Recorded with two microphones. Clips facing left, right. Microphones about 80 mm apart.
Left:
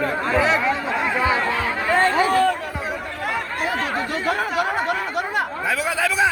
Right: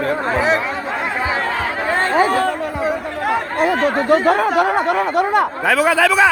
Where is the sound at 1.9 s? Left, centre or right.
Right.